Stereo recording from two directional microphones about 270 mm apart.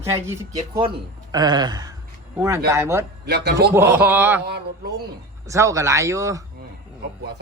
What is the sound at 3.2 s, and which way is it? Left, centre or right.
Speech, right.